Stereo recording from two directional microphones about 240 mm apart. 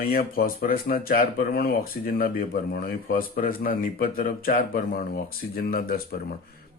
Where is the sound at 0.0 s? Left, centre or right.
Left.